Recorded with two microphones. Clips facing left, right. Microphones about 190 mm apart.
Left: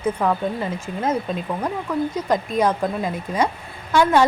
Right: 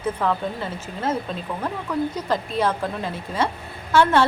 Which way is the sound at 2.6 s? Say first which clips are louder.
Left 3 dB; 15° left (ahead or behind).